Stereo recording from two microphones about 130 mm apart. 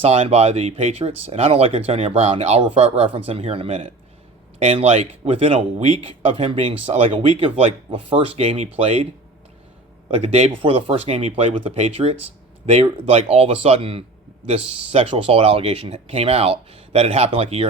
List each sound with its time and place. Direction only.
0.0 s speech: 50° right (ahead or behind)
10.2 s speech: 50° right (ahead or behind)
10.6 s speech: 40° right (ahead or behind)